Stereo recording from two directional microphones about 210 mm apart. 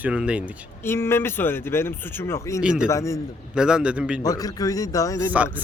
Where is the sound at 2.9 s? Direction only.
15° left (ahead or behind).